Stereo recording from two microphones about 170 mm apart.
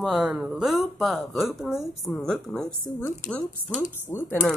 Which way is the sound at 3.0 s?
10° left (ahead or behind).